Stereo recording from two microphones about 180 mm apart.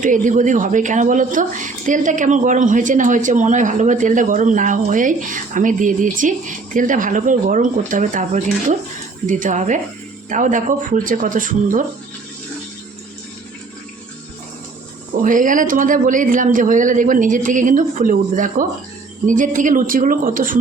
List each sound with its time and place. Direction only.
0.0 s speech: 45° right (ahead or behind)
15.2 s speech: 45° right (ahead or behind)